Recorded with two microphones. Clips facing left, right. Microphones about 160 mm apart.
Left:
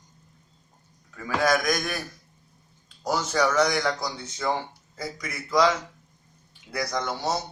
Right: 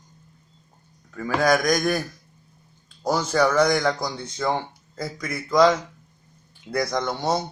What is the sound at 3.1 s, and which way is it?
Speech, 50° right (ahead or behind).